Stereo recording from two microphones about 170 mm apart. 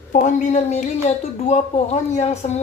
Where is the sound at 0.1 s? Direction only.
45° left (ahead or behind).